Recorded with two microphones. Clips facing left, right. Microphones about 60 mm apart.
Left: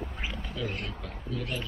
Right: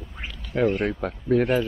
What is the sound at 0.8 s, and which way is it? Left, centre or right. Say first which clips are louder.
Speech: right 14 dB; right.